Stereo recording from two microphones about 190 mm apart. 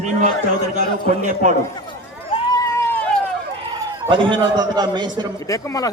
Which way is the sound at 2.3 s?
20° left (ahead or behind).